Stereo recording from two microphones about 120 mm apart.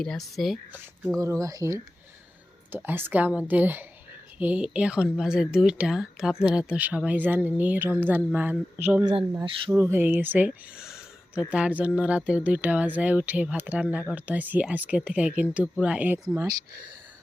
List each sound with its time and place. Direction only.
0.0 s speech: 5° left (ahead or behind)
0.7 s speech: 15° right (ahead or behind)
1.2 s speech: 25° right (ahead or behind)
2.7 s speech: 15° right (ahead or behind)
16.3 s speech: 25° right (ahead or behind)